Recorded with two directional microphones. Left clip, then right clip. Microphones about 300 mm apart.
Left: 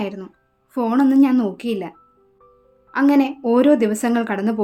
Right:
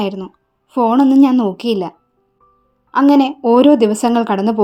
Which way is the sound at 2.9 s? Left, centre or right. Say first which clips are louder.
Right 5 dB; centre.